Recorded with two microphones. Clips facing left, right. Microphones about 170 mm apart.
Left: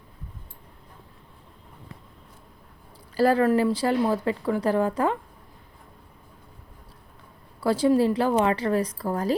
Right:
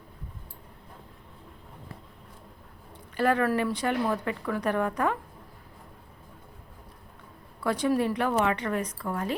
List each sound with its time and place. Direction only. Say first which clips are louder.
3.2 s speech: left 5 dB; 30° left (ahead or behind)
7.6 s a woman's voice: left 5 dB; 30° left (ahead or behind)